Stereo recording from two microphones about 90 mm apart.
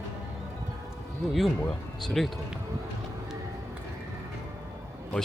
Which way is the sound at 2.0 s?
Centre (ahead or behind).